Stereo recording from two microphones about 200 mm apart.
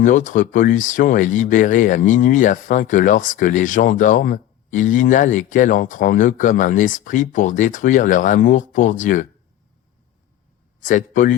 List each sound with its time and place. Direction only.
0.0 s speech: 40° left (ahead or behind)
10.8 s speech: 40° left (ahead or behind)